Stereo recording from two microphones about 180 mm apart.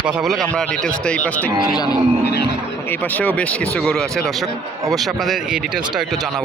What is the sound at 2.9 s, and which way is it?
Speech, 10° left (ahead or behind).